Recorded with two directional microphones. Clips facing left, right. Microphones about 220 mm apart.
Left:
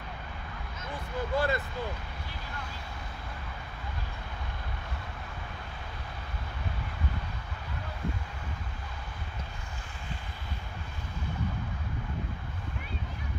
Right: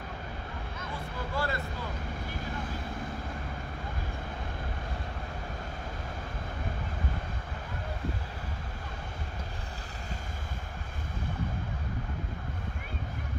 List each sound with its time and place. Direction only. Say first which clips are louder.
1.3 s vehicle: left 5 dB; 20° left (ahead or behind)